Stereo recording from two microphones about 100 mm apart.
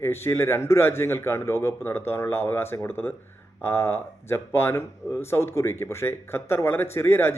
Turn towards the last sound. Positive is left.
turn(degrees=25)  # may be behind; listen again after turning